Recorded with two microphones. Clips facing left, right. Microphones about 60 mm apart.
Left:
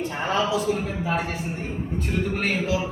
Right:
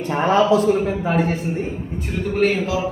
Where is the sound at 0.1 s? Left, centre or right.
Right.